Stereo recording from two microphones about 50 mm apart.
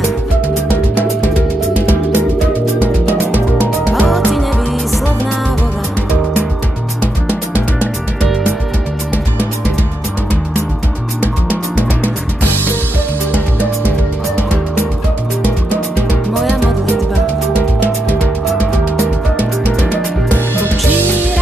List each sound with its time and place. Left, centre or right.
1.7 s music: right
3.3 s music: right
19.3 s music: right